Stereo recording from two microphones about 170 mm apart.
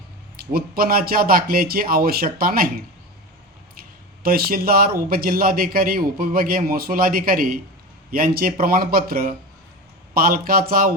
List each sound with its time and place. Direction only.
0.3 s a man's voice: 60° right (ahead or behind)
4.2 s a man's voice: 60° right (ahead or behind)